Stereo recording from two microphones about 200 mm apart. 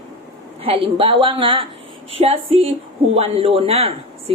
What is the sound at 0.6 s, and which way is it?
Speech, 25° right (ahead or behind).